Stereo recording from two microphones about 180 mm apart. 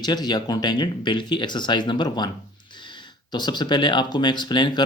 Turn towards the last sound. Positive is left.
turn(degrees=25)  # may be behind; listen again after turning